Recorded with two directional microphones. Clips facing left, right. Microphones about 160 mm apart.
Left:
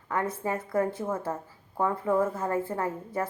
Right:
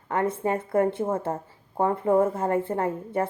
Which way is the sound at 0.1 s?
25° right (ahead or behind).